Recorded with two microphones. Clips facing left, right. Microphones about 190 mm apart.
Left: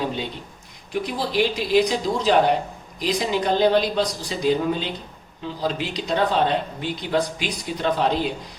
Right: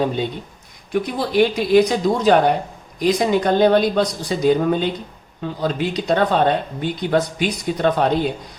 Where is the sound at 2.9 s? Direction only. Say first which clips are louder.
Right 6 dB; 55° right (ahead or behind).